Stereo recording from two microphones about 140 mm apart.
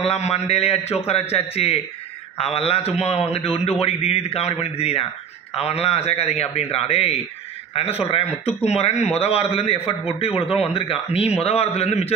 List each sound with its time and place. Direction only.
0.0 s a man's voice: 50° left (ahead or behind)